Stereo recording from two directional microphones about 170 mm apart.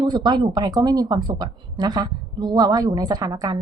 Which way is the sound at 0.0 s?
25° right (ahead or behind).